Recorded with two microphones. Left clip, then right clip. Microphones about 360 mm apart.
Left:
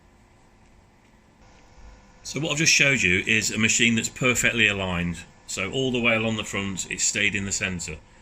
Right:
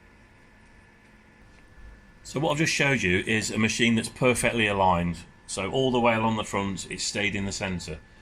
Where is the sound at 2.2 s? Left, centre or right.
Centre.